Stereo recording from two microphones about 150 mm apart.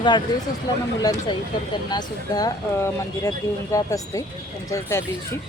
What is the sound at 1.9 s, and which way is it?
Speech, 25° left (ahead or behind).